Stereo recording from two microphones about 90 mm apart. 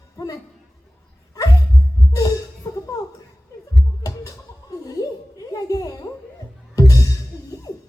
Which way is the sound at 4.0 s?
40° left (ahead or behind).